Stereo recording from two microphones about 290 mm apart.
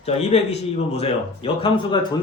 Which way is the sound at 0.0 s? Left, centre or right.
Left.